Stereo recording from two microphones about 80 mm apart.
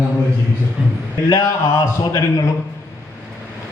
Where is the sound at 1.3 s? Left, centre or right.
Left.